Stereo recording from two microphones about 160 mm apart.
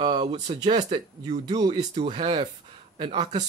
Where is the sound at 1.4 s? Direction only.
25° right (ahead or behind).